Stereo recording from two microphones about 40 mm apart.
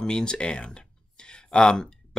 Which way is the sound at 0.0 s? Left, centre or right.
Centre.